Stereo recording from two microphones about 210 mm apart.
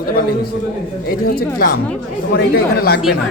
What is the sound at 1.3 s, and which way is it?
Speech, 45° left (ahead or behind).